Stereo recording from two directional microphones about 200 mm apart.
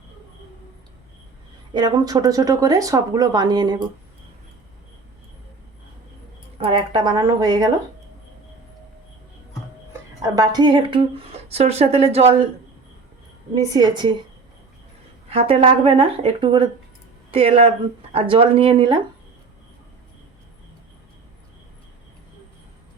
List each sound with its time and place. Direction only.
1.7 s speech: 20° right (ahead or behind)
6.6 s speech: 25° right (ahead or behind)
10.2 s speech: 20° right (ahead or behind)
13.5 s speech: 20° right (ahead or behind)
15.3 s speech: 30° right (ahead or behind)